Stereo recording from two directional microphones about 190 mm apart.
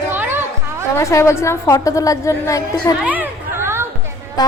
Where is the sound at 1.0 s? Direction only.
15° left (ahead or behind).